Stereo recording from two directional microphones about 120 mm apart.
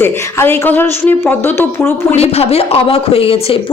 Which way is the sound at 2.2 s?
60° left (ahead or behind).